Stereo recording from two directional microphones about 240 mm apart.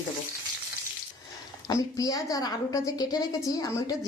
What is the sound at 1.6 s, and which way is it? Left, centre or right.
A woman's voice, centre.